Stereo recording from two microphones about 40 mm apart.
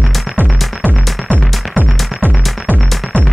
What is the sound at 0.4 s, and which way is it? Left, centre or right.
Music, right.